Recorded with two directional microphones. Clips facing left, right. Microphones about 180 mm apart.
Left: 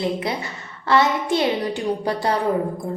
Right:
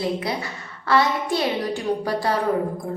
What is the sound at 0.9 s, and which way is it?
Speech, 20° left (ahead or behind).